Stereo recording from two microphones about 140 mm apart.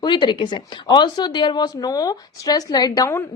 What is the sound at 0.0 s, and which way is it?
Speech, 35° left (ahead or behind).